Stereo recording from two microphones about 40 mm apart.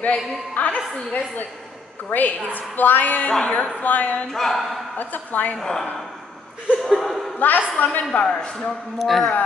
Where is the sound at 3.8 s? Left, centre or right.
Left.